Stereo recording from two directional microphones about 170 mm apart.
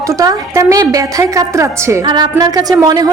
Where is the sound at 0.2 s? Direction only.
20° right (ahead or behind).